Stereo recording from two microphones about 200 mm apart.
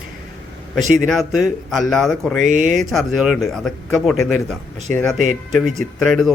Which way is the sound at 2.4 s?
40° right (ahead or behind).